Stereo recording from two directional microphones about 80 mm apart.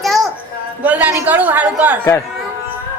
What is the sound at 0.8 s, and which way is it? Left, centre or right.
Speech, right.